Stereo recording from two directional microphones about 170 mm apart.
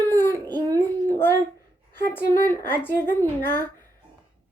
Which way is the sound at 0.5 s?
20° right (ahead or behind).